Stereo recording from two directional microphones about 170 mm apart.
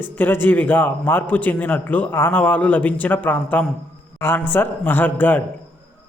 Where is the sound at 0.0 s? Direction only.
10° left (ahead or behind).